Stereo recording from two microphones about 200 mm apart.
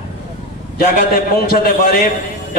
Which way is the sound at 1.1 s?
50° left (ahead or behind).